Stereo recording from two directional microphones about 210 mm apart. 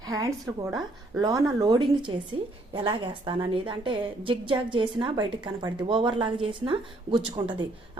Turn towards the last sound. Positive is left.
turn(degrees=-20)  # may be behind; listen again after turning